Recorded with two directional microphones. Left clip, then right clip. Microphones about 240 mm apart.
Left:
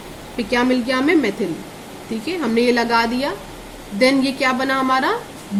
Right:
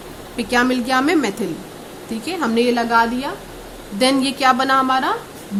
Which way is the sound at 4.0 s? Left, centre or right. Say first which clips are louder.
Even; right.